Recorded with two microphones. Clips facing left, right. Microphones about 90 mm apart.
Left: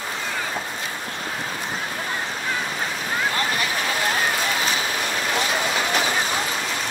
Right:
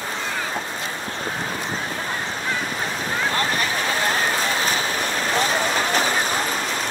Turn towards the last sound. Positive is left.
turn(degrees=-40)  # may be behind; listen again after turning